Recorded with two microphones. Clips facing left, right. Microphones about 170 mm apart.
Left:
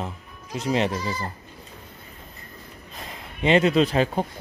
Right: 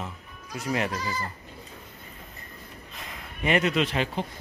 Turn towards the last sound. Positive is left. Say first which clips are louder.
# left 6 dB
turn(degrees=40)  # may be behind; listen again after turning